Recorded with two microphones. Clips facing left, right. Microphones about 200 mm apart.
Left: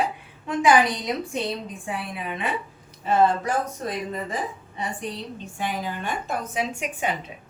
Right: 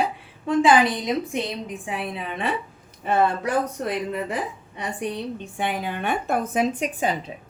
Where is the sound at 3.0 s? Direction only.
60° right (ahead or behind).